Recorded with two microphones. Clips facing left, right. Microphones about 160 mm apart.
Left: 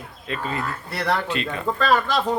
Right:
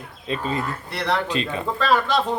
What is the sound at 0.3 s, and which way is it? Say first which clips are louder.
Speech: right 2 dB; 20° right (ahead or behind).